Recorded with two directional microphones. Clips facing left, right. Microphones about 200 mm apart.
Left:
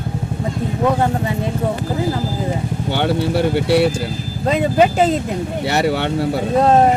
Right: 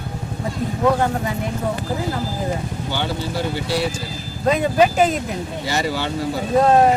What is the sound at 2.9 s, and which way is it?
Speech, 65° left (ahead or behind).